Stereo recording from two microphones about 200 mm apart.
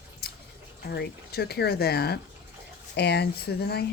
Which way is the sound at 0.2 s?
50° left (ahead or behind).